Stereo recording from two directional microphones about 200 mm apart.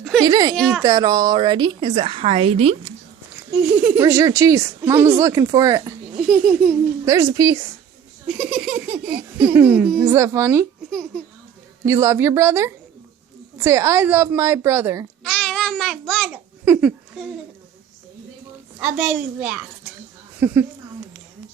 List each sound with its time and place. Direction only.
0.2 s a woman's voice: 20° right (ahead or behind)
3.3 s a woman's voice: 10° right (ahead or behind)
6.1 s a child's voice: centre (ahead or behind)
7.0 s a woman's voice: 15° right (ahead or behind)
8.3 s a child's voice: centre (ahead or behind)
11.9 s a woman's voice: 15° right (ahead or behind)
15.2 s babbling: 5° left (ahead or behind)
16.6 s a sound: 5° right (ahead or behind)
18.8 s a child's voice: 5° right (ahead or behind)